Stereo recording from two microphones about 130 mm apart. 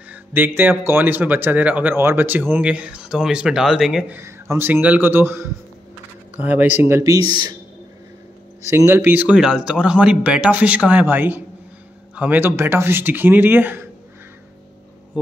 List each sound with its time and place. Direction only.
0.1 s speech: 15° right (ahead or behind)
4.1 s speech: 20° right (ahead or behind)
8.6 s speech: 20° right (ahead or behind)